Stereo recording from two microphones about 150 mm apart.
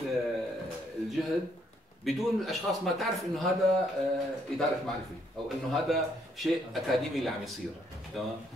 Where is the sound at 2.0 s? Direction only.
Centre (ahead or behind).